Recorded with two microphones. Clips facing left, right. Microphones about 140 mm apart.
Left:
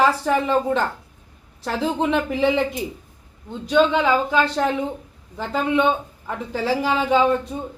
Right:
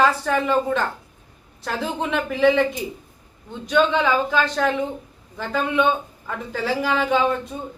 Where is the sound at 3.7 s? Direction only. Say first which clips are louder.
Left 1 dB; 10° left (ahead or behind).